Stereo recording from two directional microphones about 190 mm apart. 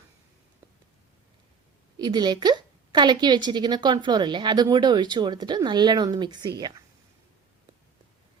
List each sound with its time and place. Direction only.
2.0 s a woman's voice: 20° right (ahead or behind)